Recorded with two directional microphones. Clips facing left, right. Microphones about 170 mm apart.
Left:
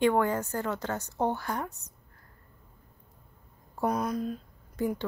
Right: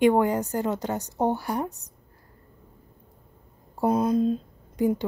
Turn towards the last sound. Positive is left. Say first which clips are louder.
# right 7 dB
turn(degrees=-20)  # may be behind; listen again after turning